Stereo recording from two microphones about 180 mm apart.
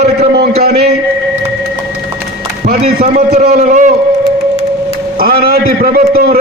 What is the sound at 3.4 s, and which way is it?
Speech, 40° right (ahead or behind).